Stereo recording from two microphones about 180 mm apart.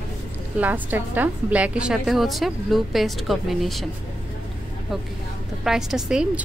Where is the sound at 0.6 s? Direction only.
10° right (ahead or behind).